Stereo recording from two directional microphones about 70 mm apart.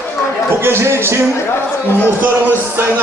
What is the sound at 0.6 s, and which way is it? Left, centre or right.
Speech, right.